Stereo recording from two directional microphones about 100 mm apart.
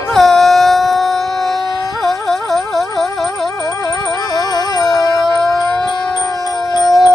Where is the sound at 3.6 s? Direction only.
35° left (ahead or behind).